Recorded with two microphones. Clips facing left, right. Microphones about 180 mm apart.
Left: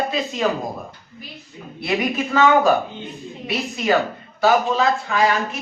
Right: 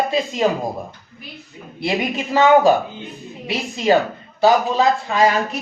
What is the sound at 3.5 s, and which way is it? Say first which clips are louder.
Speech: right 3 dB; 25° right (ahead or behind).